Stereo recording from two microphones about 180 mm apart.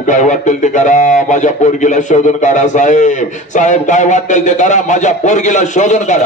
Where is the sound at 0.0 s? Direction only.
45° left (ahead or behind).